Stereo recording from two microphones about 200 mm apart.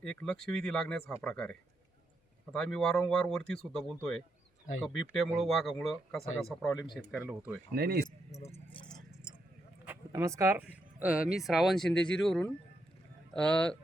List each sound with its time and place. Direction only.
0.0 s speech: 5° left (ahead or behind)
5.4 s speech: centre (ahead or behind)
7.7 s speech: 55° right (ahead or behind)
8.0 s a sound: 15° left (ahead or behind)
8.4 s a sound: 25° left (ahead or behind)
9.8 s speech: 10° right (ahead or behind); by 13.7 s 5° left (ahead or behind)